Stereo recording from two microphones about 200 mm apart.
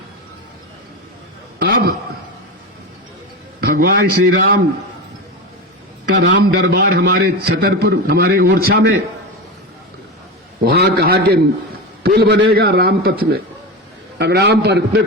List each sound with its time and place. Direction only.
1.5 s a sound: 45° right (ahead or behind)
3.6 s a man's voice: 50° right (ahead or behind)
6.1 s a man's voice: 60° right (ahead or behind)
10.6 s a man's voice: 50° right (ahead or behind)